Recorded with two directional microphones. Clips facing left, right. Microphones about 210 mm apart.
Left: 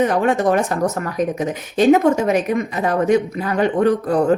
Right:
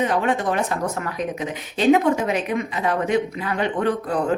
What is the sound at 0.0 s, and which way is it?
Speech, 45° left (ahead or behind).